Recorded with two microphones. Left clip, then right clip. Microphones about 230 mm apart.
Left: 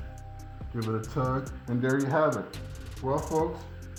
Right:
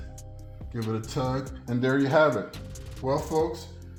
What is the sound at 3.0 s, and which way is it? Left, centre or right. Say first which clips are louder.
Rub: right 2 dB; right.